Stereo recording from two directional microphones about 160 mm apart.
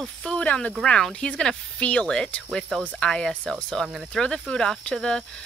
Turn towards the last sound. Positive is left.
turn(degrees=5)  # may be behind; listen again after turning